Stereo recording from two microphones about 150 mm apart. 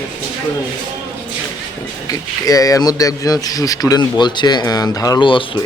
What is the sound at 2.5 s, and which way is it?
A man's voice, 25° left (ahead or behind).